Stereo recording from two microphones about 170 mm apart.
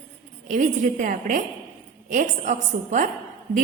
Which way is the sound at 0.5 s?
50° right (ahead or behind).